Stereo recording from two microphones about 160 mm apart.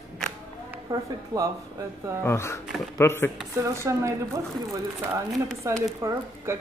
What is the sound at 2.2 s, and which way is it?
Speech, 15° left (ahead or behind).